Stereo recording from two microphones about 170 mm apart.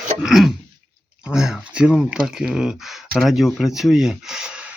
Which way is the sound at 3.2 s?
Centre (ahead or behind).